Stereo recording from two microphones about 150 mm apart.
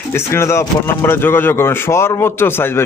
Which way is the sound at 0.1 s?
15° left (ahead or behind).